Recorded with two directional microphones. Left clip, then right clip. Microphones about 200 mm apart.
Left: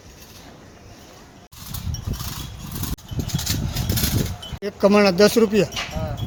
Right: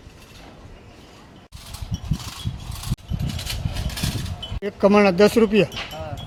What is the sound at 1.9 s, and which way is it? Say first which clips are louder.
Vehicle: left 1 dB; 50° right (ahead or behind).